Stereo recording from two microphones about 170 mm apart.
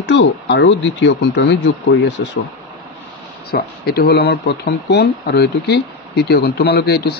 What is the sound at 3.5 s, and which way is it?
Speech, 65° left (ahead or behind).